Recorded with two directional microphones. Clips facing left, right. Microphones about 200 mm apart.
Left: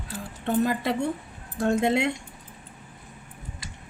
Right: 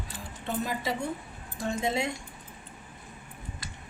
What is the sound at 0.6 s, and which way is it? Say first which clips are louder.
Speech: left 6 dB; 60° left (ahead or behind).